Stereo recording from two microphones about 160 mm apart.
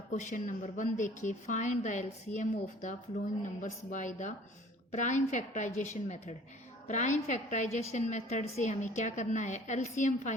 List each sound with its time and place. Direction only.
0.1 s a woman's voice: 50° left (ahead or behind)